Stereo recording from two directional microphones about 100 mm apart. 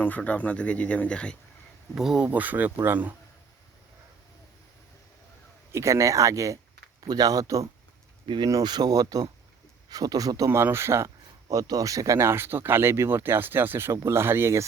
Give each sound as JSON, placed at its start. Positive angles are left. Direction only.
{"t": 0.2, "sound": "speech", "side_deg": 15}
{"t": 2.0, "sound": "speech", "side_deg": -5}
{"t": 2.2, "sound": "speech", "side_deg": -15}
{"t": 5.7, "sound": "speech", "side_deg": -30}